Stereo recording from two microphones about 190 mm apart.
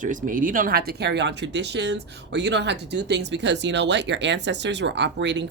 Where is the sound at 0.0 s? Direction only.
45° right (ahead or behind).